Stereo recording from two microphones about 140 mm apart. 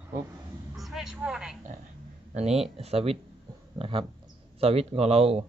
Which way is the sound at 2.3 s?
50° right (ahead or behind).